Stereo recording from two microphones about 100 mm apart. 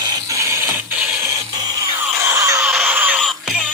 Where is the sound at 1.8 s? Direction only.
30° right (ahead or behind).